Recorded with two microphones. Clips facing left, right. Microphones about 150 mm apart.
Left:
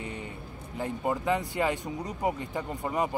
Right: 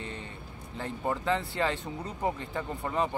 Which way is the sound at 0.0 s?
15° left (ahead or behind).